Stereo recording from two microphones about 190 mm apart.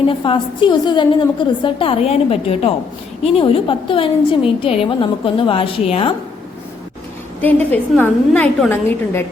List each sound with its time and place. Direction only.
0.1 s a woman's voice: 25° left (ahead or behind)
7.4 s a woman's voice: 10° left (ahead or behind)